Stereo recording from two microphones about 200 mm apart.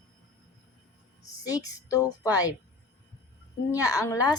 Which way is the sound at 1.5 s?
15° left (ahead or behind).